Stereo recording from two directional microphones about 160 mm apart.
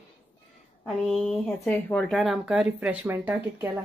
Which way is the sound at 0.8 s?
Centre (ahead or behind).